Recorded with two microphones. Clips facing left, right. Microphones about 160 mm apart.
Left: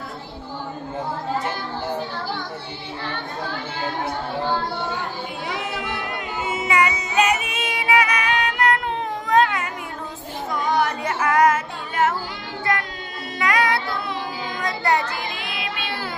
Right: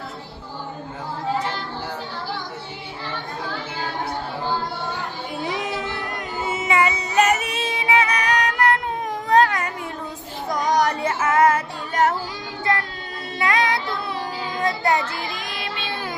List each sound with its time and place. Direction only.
5.5 s music: 25° right (ahead or behind)
7.1 s music: 45° right (ahead or behind)
9.2 s a sound: 35° right (ahead or behind)
11.0 s music: 25° right (ahead or behind)
13.4 s child singing: 25° right (ahead or behind)
15.4 s child singing: 40° right (ahead or behind)